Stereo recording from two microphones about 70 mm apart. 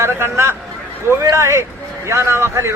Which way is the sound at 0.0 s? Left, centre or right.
Right.